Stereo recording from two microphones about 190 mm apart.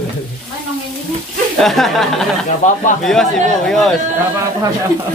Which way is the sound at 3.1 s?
5° left (ahead or behind).